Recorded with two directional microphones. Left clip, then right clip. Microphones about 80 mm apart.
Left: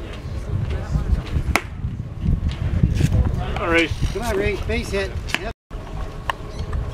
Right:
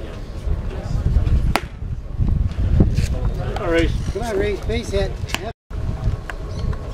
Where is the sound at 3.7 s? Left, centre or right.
Left.